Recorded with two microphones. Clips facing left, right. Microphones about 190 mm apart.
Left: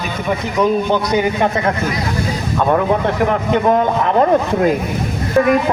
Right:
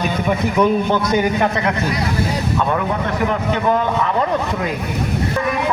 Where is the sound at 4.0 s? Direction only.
45° left (ahead or behind).